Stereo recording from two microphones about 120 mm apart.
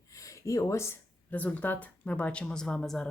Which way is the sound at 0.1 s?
25° left (ahead or behind).